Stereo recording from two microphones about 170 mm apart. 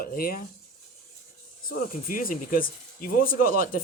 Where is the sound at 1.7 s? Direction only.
55° left (ahead or behind).